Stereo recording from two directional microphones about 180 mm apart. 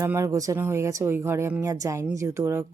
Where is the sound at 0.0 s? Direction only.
15° right (ahead or behind).